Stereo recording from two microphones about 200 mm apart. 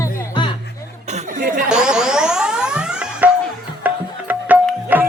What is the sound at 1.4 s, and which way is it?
Chatter, 45° right (ahead or behind).